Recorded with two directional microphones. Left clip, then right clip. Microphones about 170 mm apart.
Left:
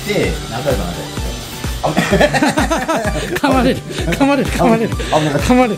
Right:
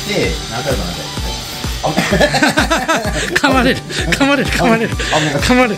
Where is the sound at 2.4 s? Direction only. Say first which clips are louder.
Right 2 dB; 5° left (ahead or behind).